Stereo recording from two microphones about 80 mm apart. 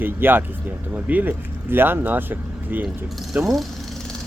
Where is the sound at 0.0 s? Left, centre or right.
Right.